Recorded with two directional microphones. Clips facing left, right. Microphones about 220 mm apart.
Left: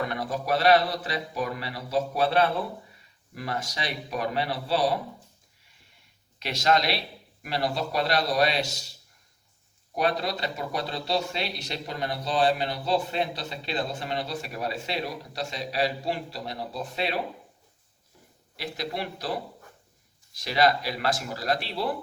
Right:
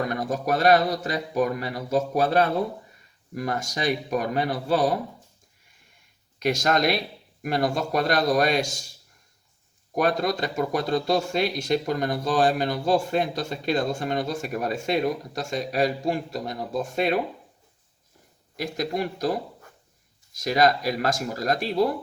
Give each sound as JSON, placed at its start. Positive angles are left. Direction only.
{"t": 0.0, "sound": "speech", "side_deg": -45}
{"t": 6.4, "sound": "speech", "side_deg": -45}
{"t": 9.9, "sound": "speech", "side_deg": -45}
{"t": 18.5, "sound": "speech", "side_deg": -45}